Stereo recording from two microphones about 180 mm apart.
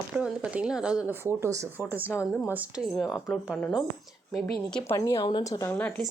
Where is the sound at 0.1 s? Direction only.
5° right (ahead or behind).